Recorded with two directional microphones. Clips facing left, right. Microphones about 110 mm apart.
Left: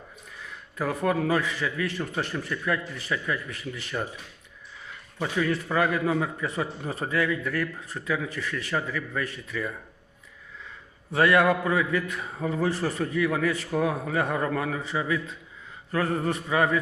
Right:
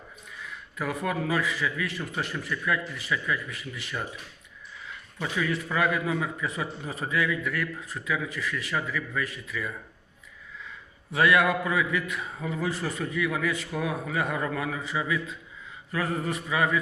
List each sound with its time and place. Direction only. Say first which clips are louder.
0.8 s a man's voice: left 4 dB; 35° left (ahead or behind)
5.2 s a man's voice: left 3 dB; 35° left (ahead or behind)
11.1 s a man's voice: left 2 dB; 35° left (ahead or behind)